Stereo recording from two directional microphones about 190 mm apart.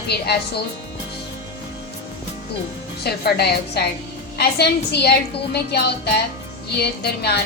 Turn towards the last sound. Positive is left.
turn(degrees=55)  # may be behind; listen again after turning